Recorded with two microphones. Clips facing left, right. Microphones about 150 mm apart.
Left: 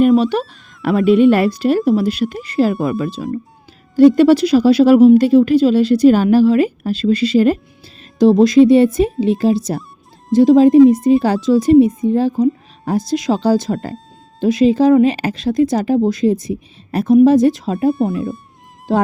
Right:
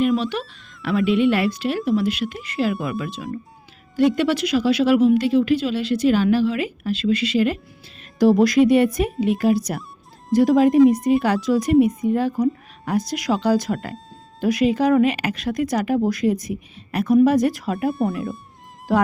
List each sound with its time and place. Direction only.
0.2 s speech: 40° left (ahead or behind)
8.2 s speech: 25° left (ahead or behind)